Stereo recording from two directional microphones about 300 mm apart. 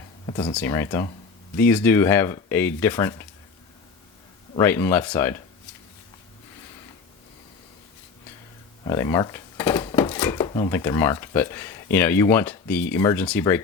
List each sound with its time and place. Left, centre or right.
0.3 s speech: centre
4.5 s speech: centre
8.8 s speech: centre